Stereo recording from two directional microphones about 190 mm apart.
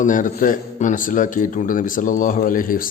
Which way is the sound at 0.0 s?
45° left (ahead or behind).